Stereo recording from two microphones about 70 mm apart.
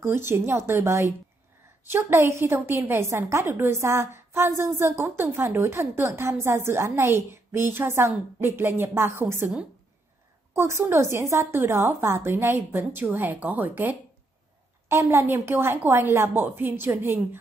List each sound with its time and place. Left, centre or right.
0.0 s a woman's voice: right
10.5 s a woman's voice: right
12.9 s speech: right
14.9 s a woman's voice: right